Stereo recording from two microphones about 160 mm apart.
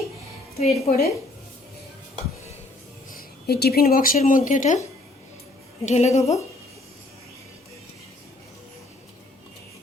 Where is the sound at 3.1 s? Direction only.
75° left (ahead or behind); by 4.8 s 50° left (ahead or behind).